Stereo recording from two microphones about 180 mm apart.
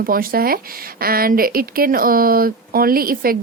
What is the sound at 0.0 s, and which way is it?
A woman's voice, 55° right (ahead or behind).